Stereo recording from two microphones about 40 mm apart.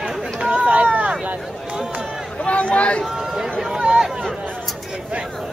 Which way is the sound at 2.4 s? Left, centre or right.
Left.